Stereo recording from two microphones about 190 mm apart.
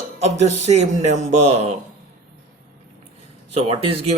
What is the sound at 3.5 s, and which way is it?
Speech, 30° right (ahead or behind).